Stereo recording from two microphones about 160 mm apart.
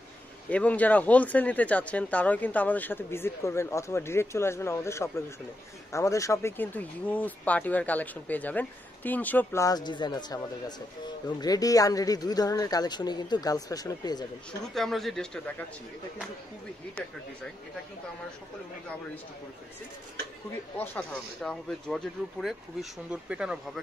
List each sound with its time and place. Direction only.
0.5 s speech: 10° left (ahead or behind); by 14.2 s 25° left (ahead or behind)
14.7 s speech: centre (ahead or behind)
20.7 s speech: 10° left (ahead or behind); by 23.8 s 5° right (ahead or behind)